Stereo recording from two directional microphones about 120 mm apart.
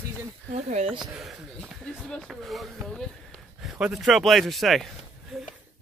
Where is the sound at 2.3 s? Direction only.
Centre (ahead or behind).